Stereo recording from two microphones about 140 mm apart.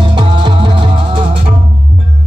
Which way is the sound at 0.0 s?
40° right (ahead or behind).